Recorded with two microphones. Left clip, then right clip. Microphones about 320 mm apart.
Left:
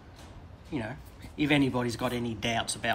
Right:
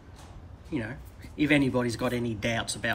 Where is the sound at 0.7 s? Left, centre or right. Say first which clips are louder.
Right 2 dB; centre.